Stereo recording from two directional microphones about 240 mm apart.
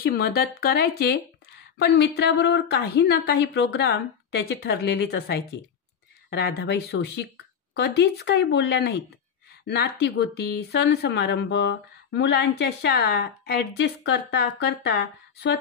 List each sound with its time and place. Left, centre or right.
0.0 s speech: left